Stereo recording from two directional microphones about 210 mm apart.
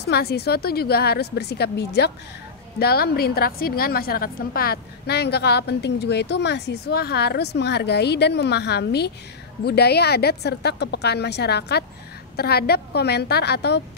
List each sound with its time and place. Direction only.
0.0 s a woman's voice: 50° left (ahead or behind)